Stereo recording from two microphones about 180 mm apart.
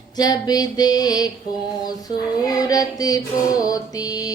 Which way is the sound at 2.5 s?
20° left (ahead or behind).